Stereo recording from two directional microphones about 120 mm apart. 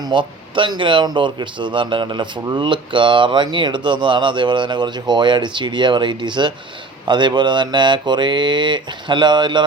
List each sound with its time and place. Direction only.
0.0 s speech: 40° right (ahead or behind)